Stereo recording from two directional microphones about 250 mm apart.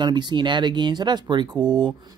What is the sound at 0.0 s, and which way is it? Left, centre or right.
Speech, centre.